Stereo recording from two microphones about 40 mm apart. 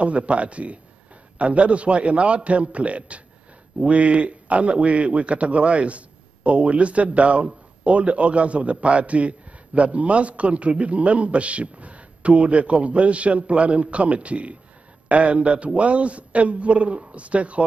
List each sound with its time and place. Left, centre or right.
0.0 s a man's voice: right